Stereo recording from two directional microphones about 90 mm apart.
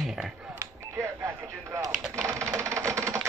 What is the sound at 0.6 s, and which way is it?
Telephone dialing, 35° right (ahead or behind).